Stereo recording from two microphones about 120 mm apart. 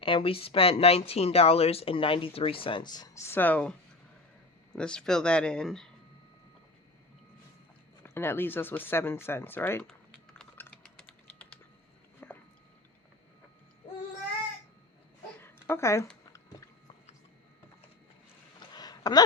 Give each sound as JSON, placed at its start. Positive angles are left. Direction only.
{"t": 0.0, "sound": "speech", "side_deg": 50}
{"t": 3.2, "sound": "speech", "side_deg": 15}
{"t": 8.0, "sound": "speech", "side_deg": 20}
{"t": 10.6, "sound": "typing", "side_deg": 15}
{"t": 12.2, "sound": "biting", "side_deg": 15}
{"t": 15.4, "sound": "a sound", "side_deg": 20}
{"t": 16.3, "sound": "biting", "side_deg": 30}
{"t": 18.7, "sound": "a sound", "side_deg": 35}